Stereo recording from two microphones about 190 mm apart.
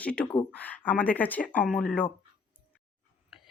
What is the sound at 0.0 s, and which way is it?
Speech, 5° left (ahead or behind).